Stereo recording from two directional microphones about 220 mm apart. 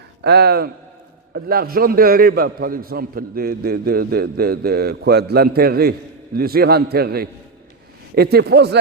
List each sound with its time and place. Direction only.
0.2 s a man's voice: 45° right (ahead or behind)